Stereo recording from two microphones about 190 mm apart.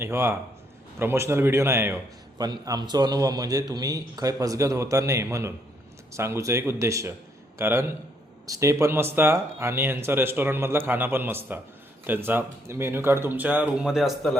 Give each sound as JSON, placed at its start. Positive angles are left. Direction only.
{"t": 0.0, "sound": "a man's voice", "side_deg": -15}